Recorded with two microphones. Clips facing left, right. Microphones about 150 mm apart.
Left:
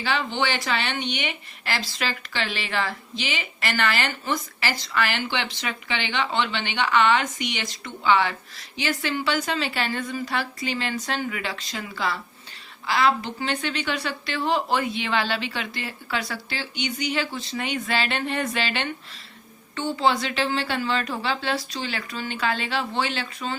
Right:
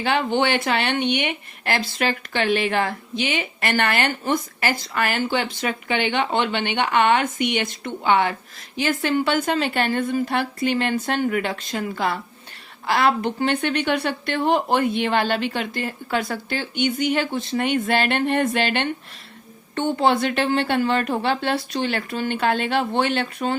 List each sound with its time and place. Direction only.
0.0 s speech: 55° right (ahead or behind)
20.0 s a woman's voice: 55° right (ahead or behind)